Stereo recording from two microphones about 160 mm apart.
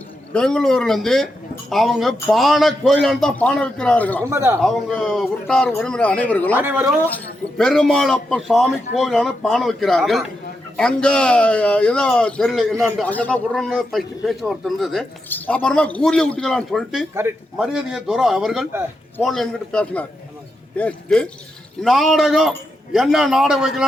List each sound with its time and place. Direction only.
0.3 s a man's voice: 5° left (ahead or behind)
4.2 s a man's voice: 15° right (ahead or behind)
4.6 s a man's voice: centre (ahead or behind)
6.6 s a man's voice: 15° right (ahead or behind)
7.6 s a man's voice: 5° left (ahead or behind)
15.3 s a man's voice: 10° left (ahead or behind)